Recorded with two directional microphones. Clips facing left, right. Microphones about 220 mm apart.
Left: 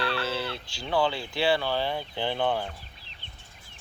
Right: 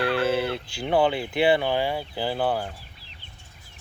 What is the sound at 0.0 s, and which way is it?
Chicken, 50° right (ahead or behind).